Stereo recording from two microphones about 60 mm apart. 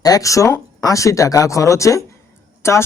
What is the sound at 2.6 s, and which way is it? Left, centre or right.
Speech, left.